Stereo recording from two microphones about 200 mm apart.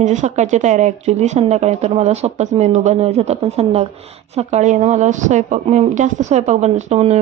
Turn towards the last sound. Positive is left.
turn(degrees=-35)  # may be behind; listen again after turning